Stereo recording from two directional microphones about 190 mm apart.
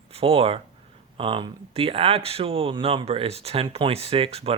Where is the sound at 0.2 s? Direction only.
30° right (ahead or behind).